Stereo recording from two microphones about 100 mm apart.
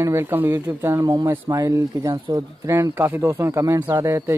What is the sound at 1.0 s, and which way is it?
Speech, 45° right (ahead or behind).